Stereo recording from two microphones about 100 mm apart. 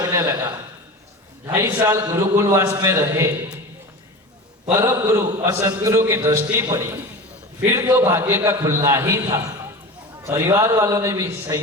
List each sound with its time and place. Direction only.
0.0 s a man's voice: 40° right (ahead or behind)
1.5 s a man's voice: 25° right (ahead or behind)
4.8 s a man's voice: 30° right (ahead or behind)